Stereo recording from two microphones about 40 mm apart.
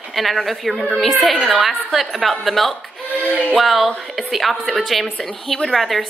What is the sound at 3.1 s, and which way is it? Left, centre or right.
Music, right.